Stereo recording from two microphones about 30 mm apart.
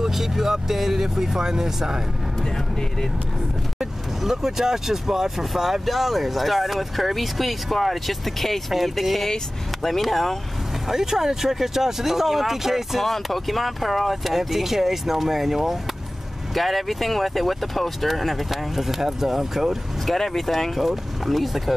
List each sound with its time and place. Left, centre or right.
0.0 s speech: centre
2.4 s speech: centre
4.2 s speech: centre
10.9 s speech: centre
13.0 s speech: centre
16.5 s speech: centre
20.1 s speech: centre